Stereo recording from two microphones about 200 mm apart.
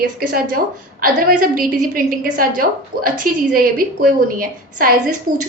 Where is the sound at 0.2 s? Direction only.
45° right (ahead or behind).